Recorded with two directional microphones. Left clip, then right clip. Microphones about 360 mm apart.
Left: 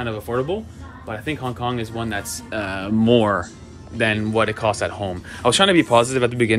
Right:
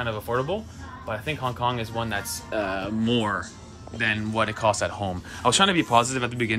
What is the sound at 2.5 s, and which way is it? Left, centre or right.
Speech, centre.